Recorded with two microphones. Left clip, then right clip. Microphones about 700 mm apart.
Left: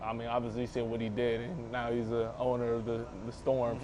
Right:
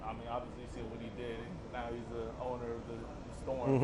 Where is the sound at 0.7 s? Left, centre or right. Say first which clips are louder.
Left 11 dB; left.